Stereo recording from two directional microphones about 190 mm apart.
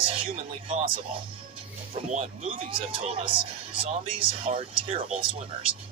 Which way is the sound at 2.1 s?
35° right (ahead or behind).